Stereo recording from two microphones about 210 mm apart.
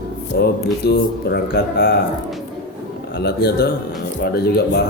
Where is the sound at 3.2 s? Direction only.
50° left (ahead or behind).